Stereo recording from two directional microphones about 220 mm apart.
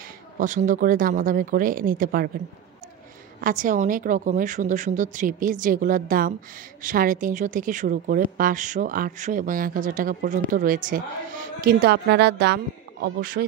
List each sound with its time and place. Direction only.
0.4 s speech: 35° right (ahead or behind)
3.3 s speech: 40° right (ahead or behind)